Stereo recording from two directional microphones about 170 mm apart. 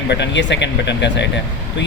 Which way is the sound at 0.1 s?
90° left.